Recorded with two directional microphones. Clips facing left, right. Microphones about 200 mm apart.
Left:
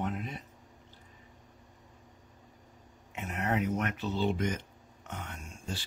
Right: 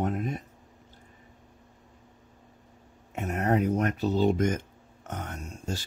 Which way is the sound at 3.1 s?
45° right (ahead or behind).